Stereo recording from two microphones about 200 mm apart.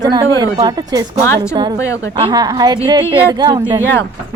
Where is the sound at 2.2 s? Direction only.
20° right (ahead or behind).